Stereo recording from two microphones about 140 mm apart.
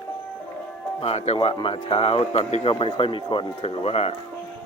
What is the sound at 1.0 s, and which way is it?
Speech, 50° left (ahead or behind).